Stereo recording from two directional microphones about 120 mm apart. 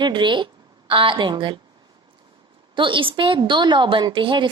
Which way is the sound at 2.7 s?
45° right (ahead or behind).